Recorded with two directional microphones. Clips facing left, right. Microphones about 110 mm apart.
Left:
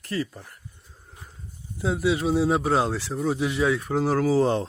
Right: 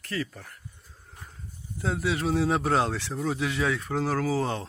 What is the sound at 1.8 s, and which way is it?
Speech, 10° left (ahead or behind).